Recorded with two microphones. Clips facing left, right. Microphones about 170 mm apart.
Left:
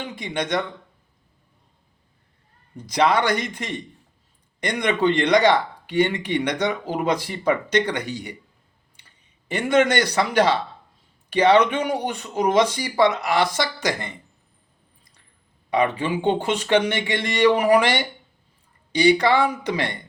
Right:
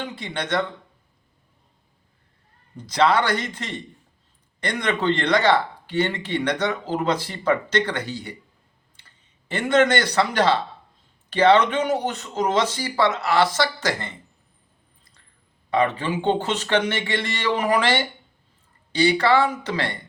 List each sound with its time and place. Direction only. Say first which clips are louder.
0.0 s speech: left 2 dB; 10° left (ahead or behind)
2.7 s speech: even; 10° left (ahead or behind)
15.7 s speech: even; 15° left (ahead or behind)